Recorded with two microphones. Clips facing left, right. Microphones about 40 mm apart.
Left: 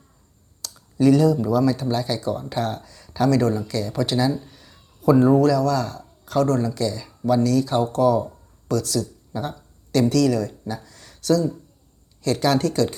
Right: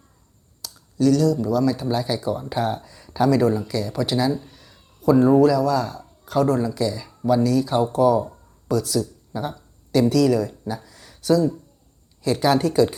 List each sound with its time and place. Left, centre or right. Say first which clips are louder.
0.6 s computer keyboard: left 1 dB; centre
0.9 s speech: left 2 dB; left
1.7 s speech: even; centre